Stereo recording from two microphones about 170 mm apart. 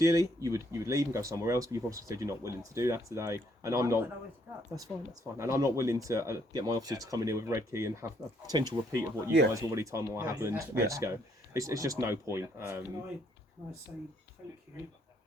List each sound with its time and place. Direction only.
0.0 s speech: 20° right (ahead or behind)
5.4 s speech: 15° right (ahead or behind)